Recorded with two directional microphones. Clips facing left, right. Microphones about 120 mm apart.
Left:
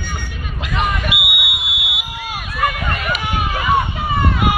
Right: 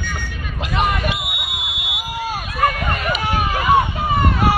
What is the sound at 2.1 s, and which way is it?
Run, 40° right (ahead or behind).